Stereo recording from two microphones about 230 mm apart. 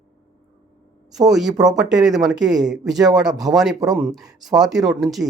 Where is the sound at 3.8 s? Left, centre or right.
Centre.